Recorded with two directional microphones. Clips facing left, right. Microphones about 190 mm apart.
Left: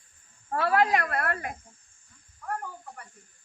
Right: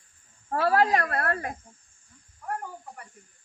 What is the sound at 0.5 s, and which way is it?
Speech, 35° right (ahead or behind).